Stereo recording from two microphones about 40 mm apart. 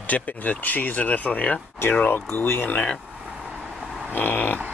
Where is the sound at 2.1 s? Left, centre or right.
Left.